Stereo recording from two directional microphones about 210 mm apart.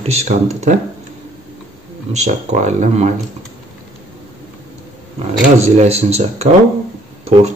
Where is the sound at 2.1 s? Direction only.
35° right (ahead or behind).